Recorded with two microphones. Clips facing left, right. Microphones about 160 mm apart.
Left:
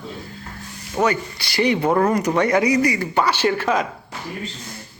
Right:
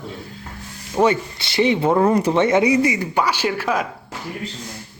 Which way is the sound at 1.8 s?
10° right (ahead or behind).